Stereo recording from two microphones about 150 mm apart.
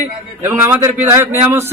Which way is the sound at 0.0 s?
15° right (ahead or behind).